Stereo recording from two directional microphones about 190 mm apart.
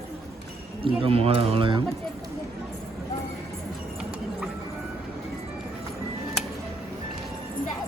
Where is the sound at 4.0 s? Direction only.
5° right (ahead or behind).